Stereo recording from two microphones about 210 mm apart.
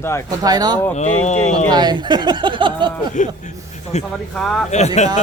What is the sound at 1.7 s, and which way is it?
Speech, 20° right (ahead or behind).